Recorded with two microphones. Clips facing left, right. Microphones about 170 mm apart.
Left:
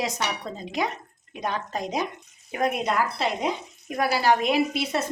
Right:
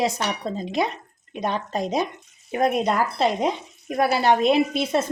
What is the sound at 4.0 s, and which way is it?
Speech, 25° right (ahead or behind).